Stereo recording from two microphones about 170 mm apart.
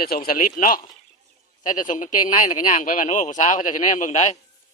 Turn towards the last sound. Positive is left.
turn(degrees=45)  # may be behind; listen again after turning